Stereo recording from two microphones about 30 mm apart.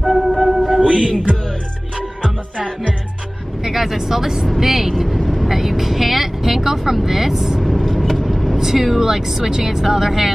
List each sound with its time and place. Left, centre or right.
0.0 s music: centre
0.7 s music: right
3.6 s speech: centre
4.6 s vehicle: centre
5.5 s speech: centre
7.6 s vehicle: centre
8.5 s speech: centre